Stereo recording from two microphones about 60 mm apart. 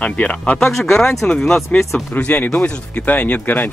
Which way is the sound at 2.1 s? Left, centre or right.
Left.